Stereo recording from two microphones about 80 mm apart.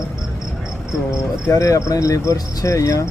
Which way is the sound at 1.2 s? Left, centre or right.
Left.